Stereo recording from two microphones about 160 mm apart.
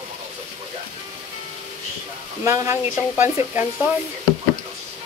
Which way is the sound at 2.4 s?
15° right (ahead or behind).